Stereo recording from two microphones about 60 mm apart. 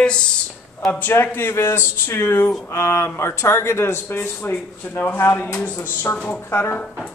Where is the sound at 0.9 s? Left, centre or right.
Left.